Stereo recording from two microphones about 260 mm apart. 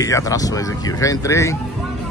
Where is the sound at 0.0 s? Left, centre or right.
Centre.